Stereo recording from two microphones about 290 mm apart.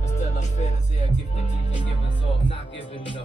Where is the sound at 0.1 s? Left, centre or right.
Left.